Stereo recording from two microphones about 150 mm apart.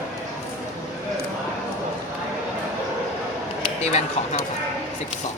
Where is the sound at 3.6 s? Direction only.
45° left (ahead or behind).